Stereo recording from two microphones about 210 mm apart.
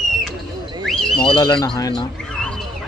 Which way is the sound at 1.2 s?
20° left (ahead or behind).